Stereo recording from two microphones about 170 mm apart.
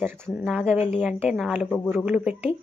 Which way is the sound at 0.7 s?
40° left (ahead or behind).